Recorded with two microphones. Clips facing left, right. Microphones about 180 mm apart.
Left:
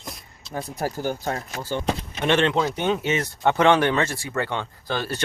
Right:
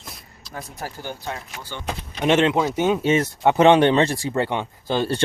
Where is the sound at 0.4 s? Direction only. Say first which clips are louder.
Left 5 dB; 25° left (ahead or behind).